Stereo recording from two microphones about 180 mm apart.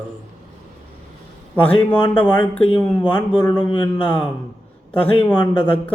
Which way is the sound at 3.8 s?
5° left (ahead or behind).